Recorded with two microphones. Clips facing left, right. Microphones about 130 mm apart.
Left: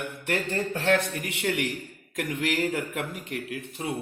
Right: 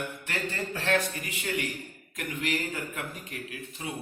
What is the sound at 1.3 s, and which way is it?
Speech, 75° left (ahead or behind).